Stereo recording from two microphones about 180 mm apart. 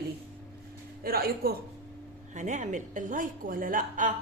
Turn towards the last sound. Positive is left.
turn(degrees=-50)  # may be behind; listen again after turning